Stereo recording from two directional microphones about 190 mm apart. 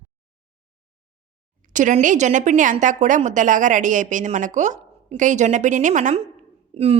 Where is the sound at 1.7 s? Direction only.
40° right (ahead or behind).